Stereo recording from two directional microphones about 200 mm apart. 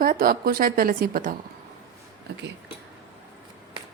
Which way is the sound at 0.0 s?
45° right (ahead or behind).